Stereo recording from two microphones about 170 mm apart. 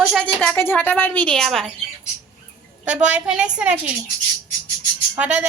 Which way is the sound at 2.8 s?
5° right (ahead or behind).